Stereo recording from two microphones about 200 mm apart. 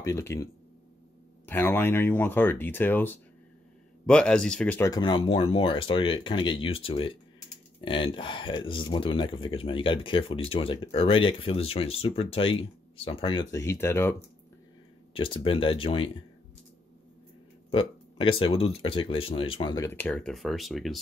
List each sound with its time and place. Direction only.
0.0 s speech: 15° left (ahead or behind)
15.1 s speech: 25° left (ahead or behind)
17.6 s speech: 25° left (ahead or behind); by 21.0 s centre (ahead or behind)